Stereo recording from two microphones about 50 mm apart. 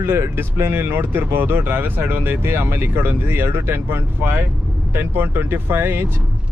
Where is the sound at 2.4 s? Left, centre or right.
Right.